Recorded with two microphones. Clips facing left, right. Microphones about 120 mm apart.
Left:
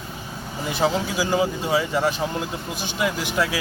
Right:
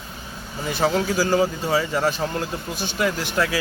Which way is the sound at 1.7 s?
Centre (ahead or behind).